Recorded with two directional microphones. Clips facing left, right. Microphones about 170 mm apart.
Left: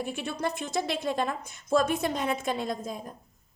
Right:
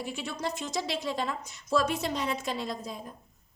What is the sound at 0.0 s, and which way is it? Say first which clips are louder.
A woman's voice: left 3 dB; 55° left (ahead or behind).